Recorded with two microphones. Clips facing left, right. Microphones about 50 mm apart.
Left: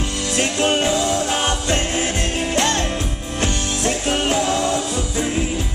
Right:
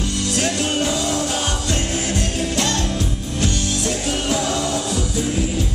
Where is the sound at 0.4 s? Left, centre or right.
Left.